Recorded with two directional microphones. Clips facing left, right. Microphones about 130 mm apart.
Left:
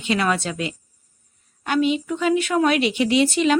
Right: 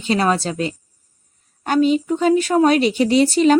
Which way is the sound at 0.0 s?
35° right (ahead or behind).